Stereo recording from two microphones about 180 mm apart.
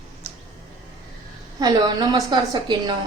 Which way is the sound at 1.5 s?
20° right (ahead or behind).